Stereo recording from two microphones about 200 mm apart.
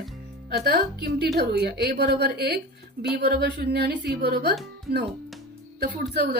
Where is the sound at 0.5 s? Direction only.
50° right (ahead or behind).